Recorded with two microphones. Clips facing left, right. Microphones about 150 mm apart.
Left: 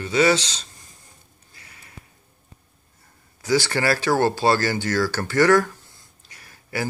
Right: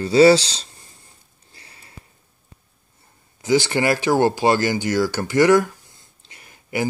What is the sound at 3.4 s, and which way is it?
Speech, 20° right (ahead or behind).